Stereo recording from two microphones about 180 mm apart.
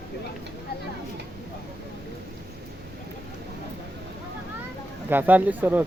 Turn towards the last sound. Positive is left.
turn(degrees=-10)  # may be behind; listen again after turning